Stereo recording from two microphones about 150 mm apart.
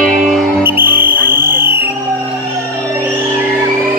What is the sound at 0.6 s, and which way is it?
Music, 15° right (ahead or behind).